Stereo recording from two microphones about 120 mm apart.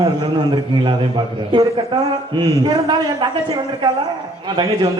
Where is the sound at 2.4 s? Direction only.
40° right (ahead or behind).